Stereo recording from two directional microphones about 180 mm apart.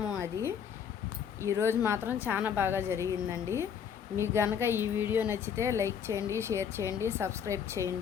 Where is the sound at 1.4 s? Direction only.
15° right (ahead or behind).